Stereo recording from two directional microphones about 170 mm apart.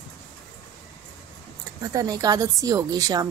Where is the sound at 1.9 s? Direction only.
20° right (ahead or behind).